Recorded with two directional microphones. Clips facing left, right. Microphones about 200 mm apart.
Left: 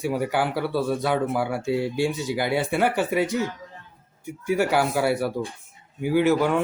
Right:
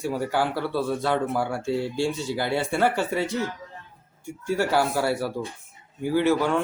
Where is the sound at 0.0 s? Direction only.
15° left (ahead or behind).